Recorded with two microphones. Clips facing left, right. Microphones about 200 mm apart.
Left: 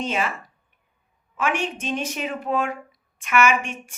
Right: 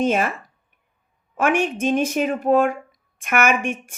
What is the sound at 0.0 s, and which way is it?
Speech, 50° right (ahead or behind).